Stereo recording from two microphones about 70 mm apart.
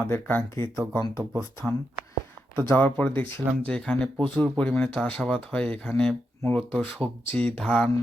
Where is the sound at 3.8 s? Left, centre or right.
Centre.